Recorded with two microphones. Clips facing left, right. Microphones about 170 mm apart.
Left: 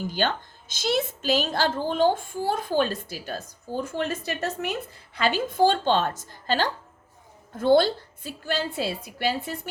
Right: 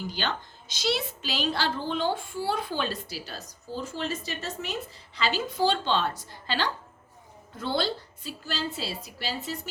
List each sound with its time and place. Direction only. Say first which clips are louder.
0.0 s a child's voice: left 5 dB; 50° left (ahead or behind)